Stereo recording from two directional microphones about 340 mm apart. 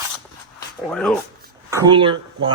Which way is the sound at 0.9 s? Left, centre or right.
Centre.